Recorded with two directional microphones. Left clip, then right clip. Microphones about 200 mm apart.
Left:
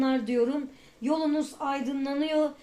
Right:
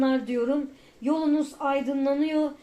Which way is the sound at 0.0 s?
35° left (ahead or behind).